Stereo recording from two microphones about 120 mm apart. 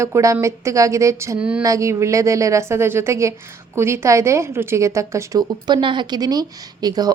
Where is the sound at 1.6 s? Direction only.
25° right (ahead or behind).